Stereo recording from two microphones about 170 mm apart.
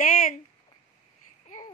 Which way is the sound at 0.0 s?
50° left (ahead or behind).